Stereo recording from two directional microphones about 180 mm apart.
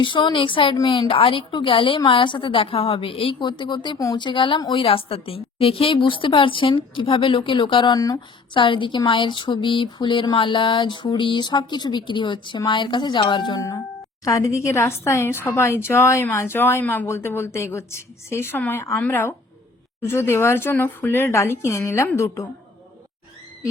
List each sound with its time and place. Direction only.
0.0 s a woman's voice: 25° left (ahead or behind)